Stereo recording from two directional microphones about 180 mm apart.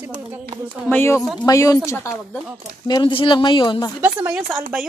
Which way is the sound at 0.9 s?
15° left (ahead or behind).